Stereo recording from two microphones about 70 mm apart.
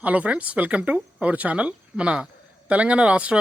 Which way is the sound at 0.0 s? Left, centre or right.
Centre.